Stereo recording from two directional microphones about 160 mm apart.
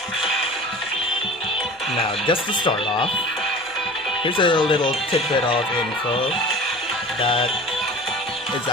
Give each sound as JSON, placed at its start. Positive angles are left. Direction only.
{"t": 2.2, "sound": "speech", "side_deg": 30}
{"t": 4.2, "sound": "speech", "side_deg": 30}
{"t": 7.2, "sound": "speech", "side_deg": 35}